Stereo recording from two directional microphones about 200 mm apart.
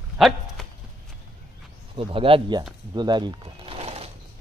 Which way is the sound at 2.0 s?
25° right (ahead or behind).